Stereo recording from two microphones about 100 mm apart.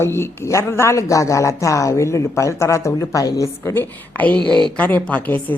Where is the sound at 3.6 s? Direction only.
20° left (ahead or behind).